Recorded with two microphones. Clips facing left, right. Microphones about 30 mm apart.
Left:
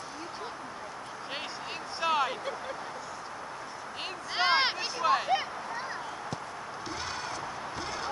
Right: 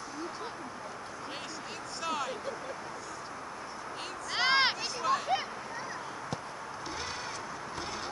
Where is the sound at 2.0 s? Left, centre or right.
Left.